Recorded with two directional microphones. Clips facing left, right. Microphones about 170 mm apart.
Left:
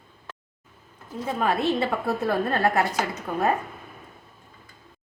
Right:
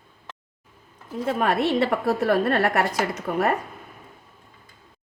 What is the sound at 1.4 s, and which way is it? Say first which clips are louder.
A woman's voice: right 2 dB; 75° right (ahead or behind).